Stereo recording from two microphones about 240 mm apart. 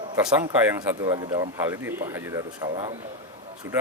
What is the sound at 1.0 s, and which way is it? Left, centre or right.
Speech, centre.